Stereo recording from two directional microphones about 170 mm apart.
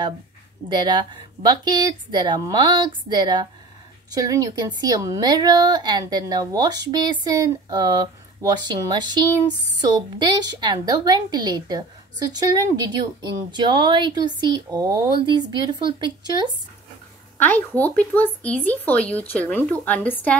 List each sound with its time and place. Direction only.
0.7 s a woman's voice: 25° right (ahead or behind)
17.4 s speech: 10° left (ahead or behind)